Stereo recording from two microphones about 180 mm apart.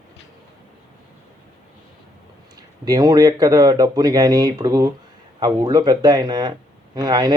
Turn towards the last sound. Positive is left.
turn(degrees=-25)  # may be behind; listen again after turning